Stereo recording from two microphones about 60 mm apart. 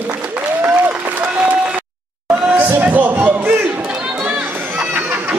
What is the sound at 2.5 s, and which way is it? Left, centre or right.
Music, right.